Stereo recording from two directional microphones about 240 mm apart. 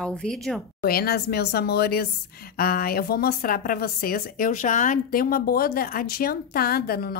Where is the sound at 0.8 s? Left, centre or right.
Left.